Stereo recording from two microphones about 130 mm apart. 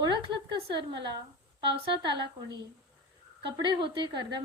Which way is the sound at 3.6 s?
40° right (ahead or behind).